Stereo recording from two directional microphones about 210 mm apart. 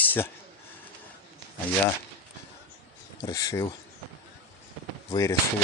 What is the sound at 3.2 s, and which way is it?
Speech, 15° left (ahead or behind).